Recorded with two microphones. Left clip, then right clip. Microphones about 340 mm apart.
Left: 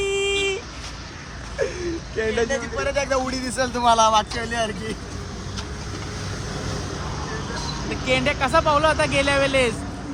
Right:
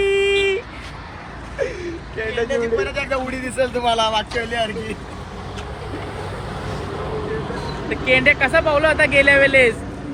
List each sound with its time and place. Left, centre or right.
0.0 s a sound: centre
2.1 s a man's voice: left
7.9 s speech: centre